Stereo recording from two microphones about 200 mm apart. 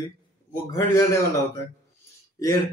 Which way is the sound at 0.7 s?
15° left (ahead or behind).